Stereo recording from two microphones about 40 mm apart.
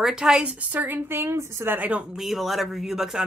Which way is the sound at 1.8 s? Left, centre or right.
Right.